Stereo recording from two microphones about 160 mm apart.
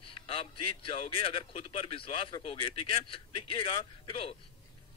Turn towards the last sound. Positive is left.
turn(degrees=35)  # may be behind; listen again after turning